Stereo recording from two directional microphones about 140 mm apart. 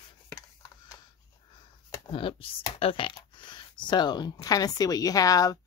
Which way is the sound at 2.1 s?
40° left (ahead or behind).